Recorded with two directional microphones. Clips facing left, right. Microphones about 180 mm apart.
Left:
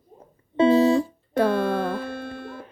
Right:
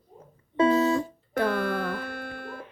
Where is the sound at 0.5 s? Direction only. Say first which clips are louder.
Left 5 dB; 30° left (ahead or behind).